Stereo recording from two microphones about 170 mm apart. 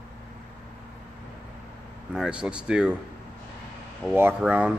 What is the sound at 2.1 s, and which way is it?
Speech, 5° right (ahead or behind).